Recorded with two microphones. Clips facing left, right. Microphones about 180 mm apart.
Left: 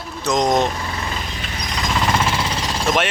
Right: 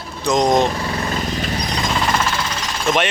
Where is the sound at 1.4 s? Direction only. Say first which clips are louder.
Right 7 dB; 35° right (ahead or behind).